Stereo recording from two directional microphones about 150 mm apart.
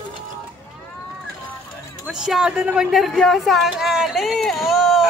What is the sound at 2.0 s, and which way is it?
A woman's voice, 5° right (ahead or behind).